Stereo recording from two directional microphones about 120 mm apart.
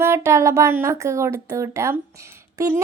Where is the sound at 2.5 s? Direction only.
30° right (ahead or behind).